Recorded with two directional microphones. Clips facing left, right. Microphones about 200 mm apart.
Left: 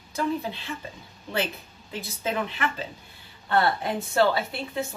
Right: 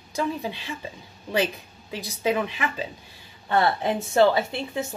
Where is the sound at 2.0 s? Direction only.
15° right (ahead or behind).